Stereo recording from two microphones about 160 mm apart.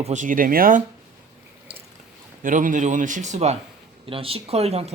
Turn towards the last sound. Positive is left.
turn(degrees=-40)  # may be behind; listen again after turning